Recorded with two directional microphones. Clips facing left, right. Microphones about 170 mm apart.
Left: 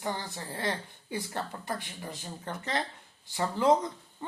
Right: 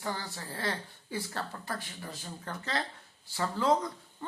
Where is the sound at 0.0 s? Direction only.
20° left (ahead or behind).